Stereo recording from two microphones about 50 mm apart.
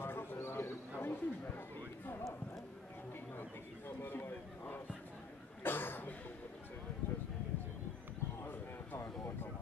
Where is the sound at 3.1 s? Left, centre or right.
Left.